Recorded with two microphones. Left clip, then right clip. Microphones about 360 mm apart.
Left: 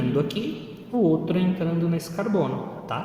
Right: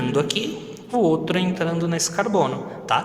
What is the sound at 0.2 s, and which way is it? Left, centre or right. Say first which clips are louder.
A man's voice: right 4 dB; right.